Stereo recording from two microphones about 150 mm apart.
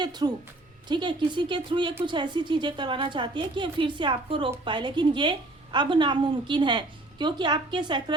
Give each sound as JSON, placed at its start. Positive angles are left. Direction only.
{"t": 0.0, "sound": "a woman's voice", "side_deg": -30}